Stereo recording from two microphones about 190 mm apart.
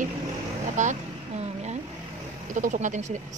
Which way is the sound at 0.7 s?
35° right (ahead or behind).